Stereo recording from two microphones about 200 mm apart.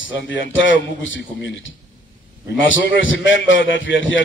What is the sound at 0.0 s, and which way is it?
A man's voice, 70° left (ahead or behind).